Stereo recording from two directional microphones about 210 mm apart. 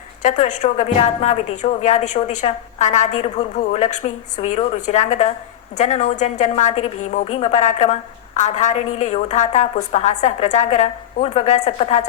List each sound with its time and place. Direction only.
0.2 s a woman's voice: 35° left (ahead or behind)